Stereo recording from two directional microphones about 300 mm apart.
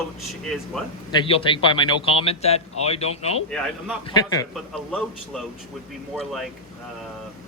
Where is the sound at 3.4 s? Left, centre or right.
Centre.